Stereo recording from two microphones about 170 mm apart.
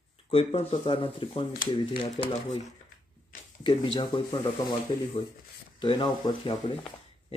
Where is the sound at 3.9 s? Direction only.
25° left (ahead or behind).